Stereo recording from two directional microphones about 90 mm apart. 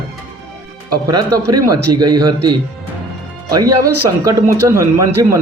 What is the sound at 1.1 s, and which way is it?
A man's voice, 45° right (ahead or behind).